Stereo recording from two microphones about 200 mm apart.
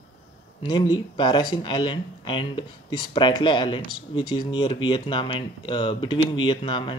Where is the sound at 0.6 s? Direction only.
20° left (ahead or behind).